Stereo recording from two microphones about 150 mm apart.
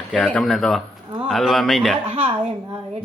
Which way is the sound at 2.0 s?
40° right (ahead or behind).